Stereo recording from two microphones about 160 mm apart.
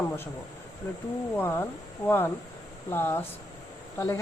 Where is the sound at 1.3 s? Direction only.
15° left (ahead or behind).